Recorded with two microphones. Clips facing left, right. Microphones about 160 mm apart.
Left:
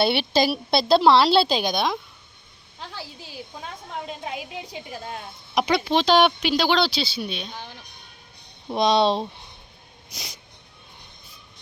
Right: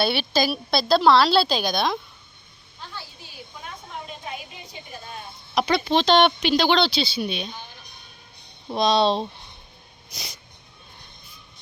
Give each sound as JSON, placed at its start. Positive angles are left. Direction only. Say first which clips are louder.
{"t": 0.0, "sound": "a woman's voice", "louder": "left 2 dB", "side_deg": 25}
{"t": 2.9, "sound": "a sound", "louder": "left 4 dB", "side_deg": 90}
{"t": 4.3, "sound": "a woman's voice", "louder": "left 4 dB", "side_deg": 90}
{"t": 5.5, "sound": "speech", "louder": "even", "side_deg": 10}
{"t": 8.7, "sound": "speech", "louder": "even", "side_deg": 20}